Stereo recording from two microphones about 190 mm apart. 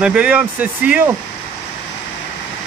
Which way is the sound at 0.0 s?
5° right (ahead or behind).